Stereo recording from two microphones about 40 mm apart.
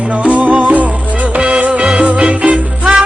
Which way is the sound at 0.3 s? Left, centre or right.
Right.